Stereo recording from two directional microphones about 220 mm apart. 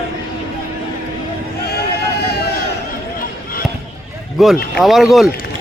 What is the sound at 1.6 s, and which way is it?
Sheep, 45° left (ahead or behind).